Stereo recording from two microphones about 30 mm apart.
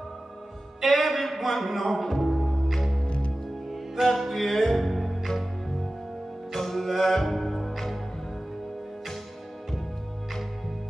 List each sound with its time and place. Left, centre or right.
0.7 s a man's voice: centre
2.7 s music: centre
6.5 s music: centre